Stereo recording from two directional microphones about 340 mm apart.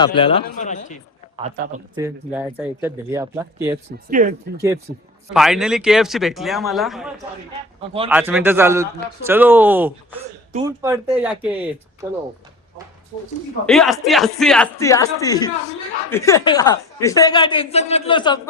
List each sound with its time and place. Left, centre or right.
0.0 s a woman's voice: centre
1.4 s speech: right
2.0 s speech: centre
4.1 s speech: right
5.3 s speech: centre
7.8 s speech: centre
8.1 s speech: centre
13.7 s a woman's voice: centre